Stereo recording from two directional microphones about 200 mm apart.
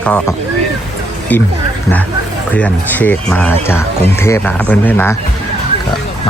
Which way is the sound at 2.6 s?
10° left (ahead or behind).